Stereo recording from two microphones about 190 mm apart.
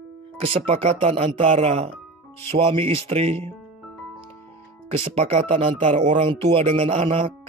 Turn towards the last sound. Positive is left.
turn(degrees=-30)  # may be behind; listen again after turning